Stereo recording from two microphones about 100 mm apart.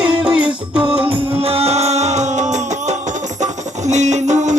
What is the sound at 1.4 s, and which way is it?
Music, 80° right.